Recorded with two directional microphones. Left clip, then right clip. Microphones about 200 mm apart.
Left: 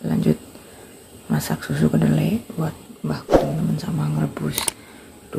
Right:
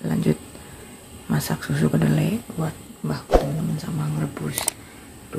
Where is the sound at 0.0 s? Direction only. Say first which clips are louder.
Left 2 dB; centre (ahead or behind).